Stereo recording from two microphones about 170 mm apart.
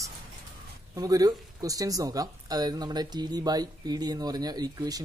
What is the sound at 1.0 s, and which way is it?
Speech, 20° right (ahead or behind).